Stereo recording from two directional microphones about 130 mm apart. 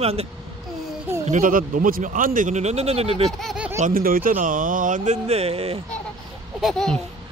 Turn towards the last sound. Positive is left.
turn(degrees=0)  # may be behind; listen again after turning